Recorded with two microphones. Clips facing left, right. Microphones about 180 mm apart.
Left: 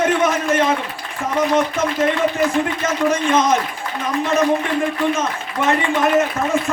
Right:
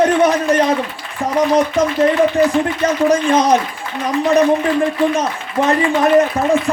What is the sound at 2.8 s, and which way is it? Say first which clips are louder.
Speech: right 6 dB; 35° right (ahead or behind).